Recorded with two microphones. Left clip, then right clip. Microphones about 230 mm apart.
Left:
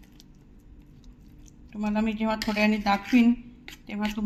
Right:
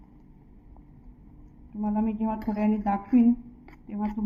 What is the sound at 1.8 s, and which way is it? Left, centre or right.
Speech, left.